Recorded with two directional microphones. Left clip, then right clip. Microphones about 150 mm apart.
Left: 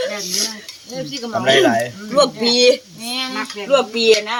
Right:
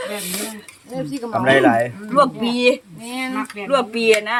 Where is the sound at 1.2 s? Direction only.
65° right (ahead or behind).